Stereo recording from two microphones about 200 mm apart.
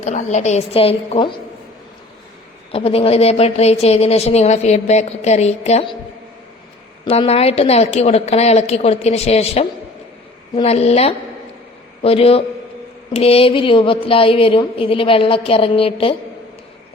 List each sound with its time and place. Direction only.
0.0 s a woman's voice: 35° left (ahead or behind)
2.7 s a woman's voice: 30° left (ahead or behind)
7.0 s a woman's voice: 30° left (ahead or behind)